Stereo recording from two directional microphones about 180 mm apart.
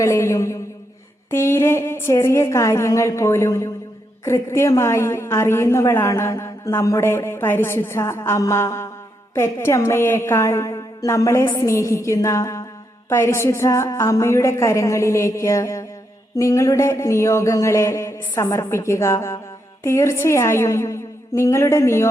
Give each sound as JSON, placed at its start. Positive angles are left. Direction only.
{"t": 0.0, "sound": "a woman's voice", "side_deg": 15}